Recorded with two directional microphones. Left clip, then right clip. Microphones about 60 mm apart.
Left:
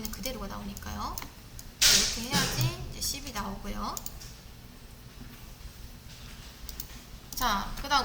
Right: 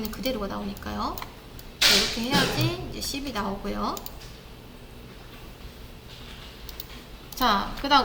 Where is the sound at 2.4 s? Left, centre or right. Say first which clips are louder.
Right 6 dB; left.